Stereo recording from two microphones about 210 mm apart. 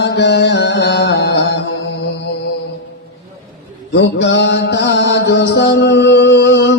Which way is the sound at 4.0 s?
55° left (ahead or behind).